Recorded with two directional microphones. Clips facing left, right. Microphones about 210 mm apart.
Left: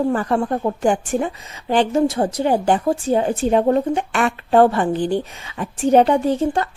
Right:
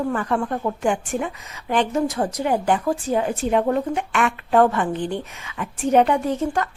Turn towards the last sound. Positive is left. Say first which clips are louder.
# left 4 dB
turn(degrees=30)  # may be behind; listen again after turning